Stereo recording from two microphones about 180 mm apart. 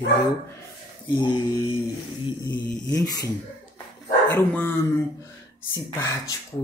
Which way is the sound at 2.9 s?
20° left (ahead or behind).